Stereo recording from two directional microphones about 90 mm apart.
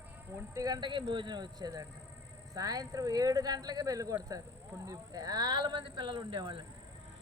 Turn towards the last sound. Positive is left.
turn(degrees=-55)  # may be behind; listen again after turning